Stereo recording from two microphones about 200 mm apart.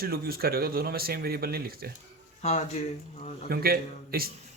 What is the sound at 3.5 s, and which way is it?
Speech, 50° right (ahead or behind).